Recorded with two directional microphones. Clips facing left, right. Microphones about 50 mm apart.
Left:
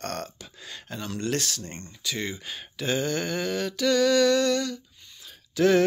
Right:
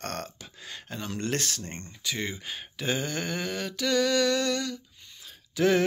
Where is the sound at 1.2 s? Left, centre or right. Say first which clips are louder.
Left 2 dB; right.